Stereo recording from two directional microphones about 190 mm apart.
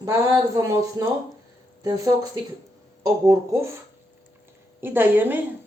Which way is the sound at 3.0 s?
15° right (ahead or behind).